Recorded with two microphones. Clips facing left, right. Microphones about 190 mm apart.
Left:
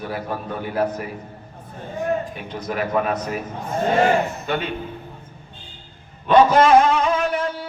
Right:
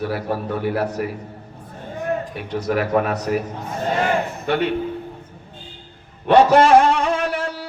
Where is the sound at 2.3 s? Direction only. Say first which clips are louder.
Right 6 dB; 70° right (ahead or behind).